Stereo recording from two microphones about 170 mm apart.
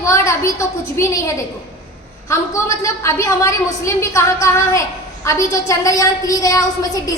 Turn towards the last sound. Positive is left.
turn(degrees=20)  # may be behind; listen again after turning